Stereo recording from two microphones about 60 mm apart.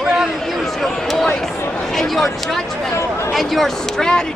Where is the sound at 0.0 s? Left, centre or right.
Centre.